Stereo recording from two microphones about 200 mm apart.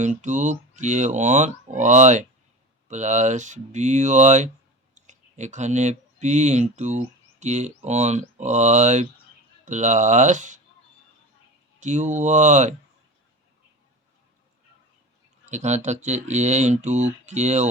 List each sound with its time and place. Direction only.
0.0 s speech: 35° right (ahead or behind)
11.8 s speech: 35° right (ahead or behind)
15.4 s speech: 35° right (ahead or behind)